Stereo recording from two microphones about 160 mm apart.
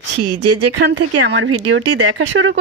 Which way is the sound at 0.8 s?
90° right.